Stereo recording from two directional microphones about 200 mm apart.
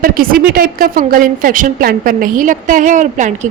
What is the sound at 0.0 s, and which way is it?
A woman's voice, 45° right (ahead or behind).